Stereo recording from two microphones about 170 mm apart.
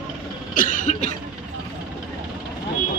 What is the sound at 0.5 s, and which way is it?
Cough, 50° left (ahead or behind).